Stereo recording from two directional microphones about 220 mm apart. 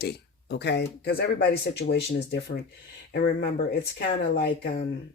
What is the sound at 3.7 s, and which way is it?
Speech, 50° left (ahead or behind).